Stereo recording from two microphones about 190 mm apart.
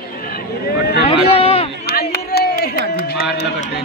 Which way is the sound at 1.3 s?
30° left (ahead or behind).